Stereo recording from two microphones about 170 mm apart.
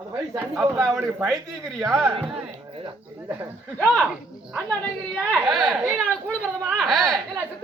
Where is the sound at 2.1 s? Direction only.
35° right (ahead or behind).